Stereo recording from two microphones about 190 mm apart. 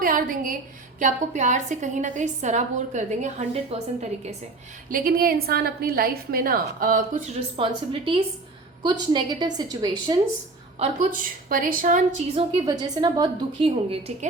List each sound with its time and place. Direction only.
0.0 s a woman's voice: 45° right (ahead or behind)
4.9 s a woman's voice: 50° right (ahead or behind)
7.5 s a woman's voice: 25° right (ahead or behind)
10.8 s a woman's voice: 35° right (ahead or behind)
11.2 s a woman's voice: 50° right (ahead or behind)
12.3 s a woman's voice: 25° right (ahead or behind)